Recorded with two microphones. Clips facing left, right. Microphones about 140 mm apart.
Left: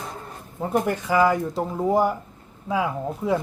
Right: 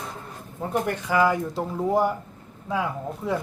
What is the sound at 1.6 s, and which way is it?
Speech, 15° left (ahead or behind).